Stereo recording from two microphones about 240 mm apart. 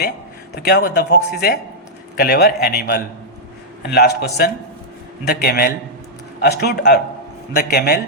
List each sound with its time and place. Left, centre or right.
0.5 s speech: left